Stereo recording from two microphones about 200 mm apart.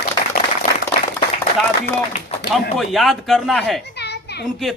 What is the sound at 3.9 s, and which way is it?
Children playing, 55° left (ahead or behind).